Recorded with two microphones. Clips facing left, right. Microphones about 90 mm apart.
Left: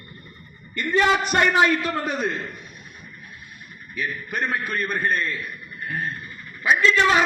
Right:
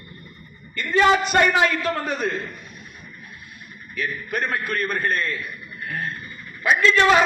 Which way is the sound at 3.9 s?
15° left (ahead or behind).